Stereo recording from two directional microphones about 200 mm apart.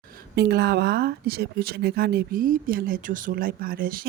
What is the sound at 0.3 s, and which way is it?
Speech, 55° right (ahead or behind).